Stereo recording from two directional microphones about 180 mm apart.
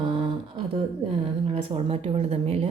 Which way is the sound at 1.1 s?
30° right (ahead or behind).